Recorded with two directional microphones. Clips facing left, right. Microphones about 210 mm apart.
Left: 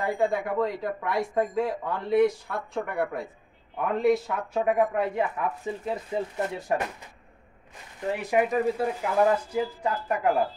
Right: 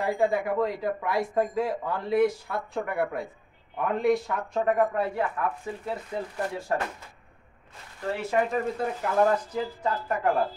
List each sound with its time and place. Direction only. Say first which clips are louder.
0.0 s speech: right 1 dB; centre (ahead or behind); by 6.8 s 20° left (ahead or behind)
8.0 s speech: left 2 dB; 15° left (ahead or behind)
8.5 s speech: left 3 dB; centre (ahead or behind)